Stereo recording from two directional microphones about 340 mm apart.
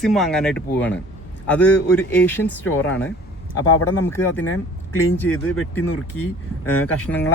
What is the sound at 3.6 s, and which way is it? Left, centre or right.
Speech, left.